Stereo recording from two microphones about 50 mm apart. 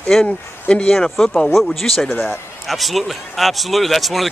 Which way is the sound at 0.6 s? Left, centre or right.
Left.